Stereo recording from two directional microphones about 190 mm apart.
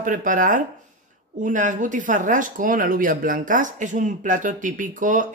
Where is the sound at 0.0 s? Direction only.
45° right (ahead or behind).